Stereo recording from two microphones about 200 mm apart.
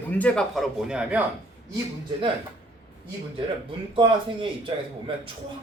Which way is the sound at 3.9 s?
25° right (ahead or behind).